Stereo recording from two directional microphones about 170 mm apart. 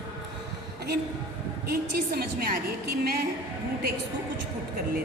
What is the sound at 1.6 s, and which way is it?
A woman's voice, 60° right (ahead or behind).